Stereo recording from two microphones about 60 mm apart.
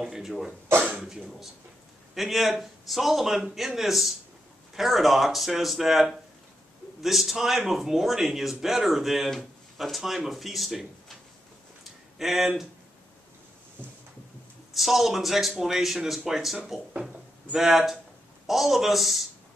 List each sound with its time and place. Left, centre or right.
0.0 s a man's voice: centre
12.2 s a man's voice: centre
14.7 s a man's voice: centre